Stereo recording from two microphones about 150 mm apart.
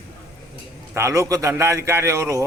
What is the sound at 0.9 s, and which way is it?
A man's voice, 20° right (ahead or behind).